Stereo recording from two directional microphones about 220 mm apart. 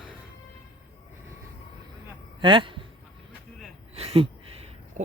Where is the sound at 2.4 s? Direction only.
20° right (ahead or behind).